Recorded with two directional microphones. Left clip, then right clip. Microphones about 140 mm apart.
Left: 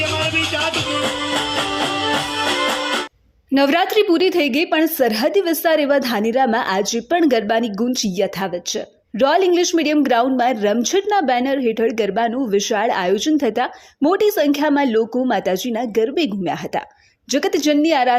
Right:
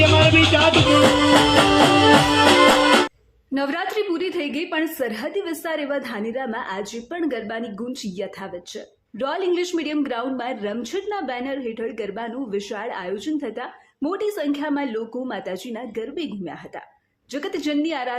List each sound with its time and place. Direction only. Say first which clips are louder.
0.0 s music: right 4 dB; 10° right (ahead or behind)
3.5 s a woman's voice: left 9 dB; 50° left (ahead or behind)